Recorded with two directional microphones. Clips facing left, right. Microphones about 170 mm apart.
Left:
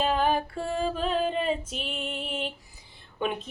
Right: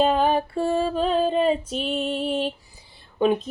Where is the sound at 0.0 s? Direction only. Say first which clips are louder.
Right 5 dB; 35° right (ahead or behind).